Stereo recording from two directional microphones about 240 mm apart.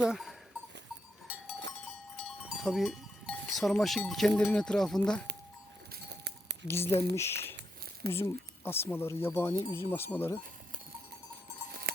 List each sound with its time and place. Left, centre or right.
0.0 s livestock: centre
1.3 s goat: centre
2.5 s cowbell: centre
5.9 s a sound: right
6.7 s speech: centre